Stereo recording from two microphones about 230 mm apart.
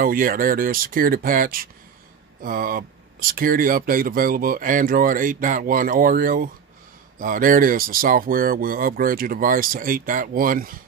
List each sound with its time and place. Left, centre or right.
0.0 s speech: right